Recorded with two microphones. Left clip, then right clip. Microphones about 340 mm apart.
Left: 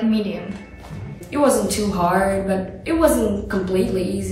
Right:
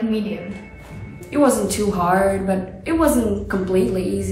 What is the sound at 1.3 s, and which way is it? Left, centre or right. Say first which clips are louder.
A woman's voice: even; centre.